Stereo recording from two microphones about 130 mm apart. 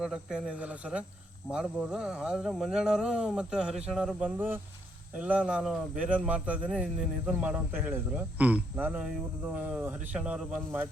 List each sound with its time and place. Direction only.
0.0 s speech: 5° right (ahead or behind)
4.4 s speech: 15° right (ahead or behind)